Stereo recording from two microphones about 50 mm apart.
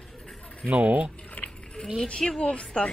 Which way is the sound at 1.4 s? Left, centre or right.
Left.